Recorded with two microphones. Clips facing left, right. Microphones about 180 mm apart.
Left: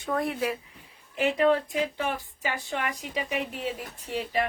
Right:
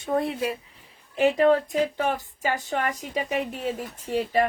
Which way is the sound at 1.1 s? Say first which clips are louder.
Right 4 dB; 40° right (ahead or behind).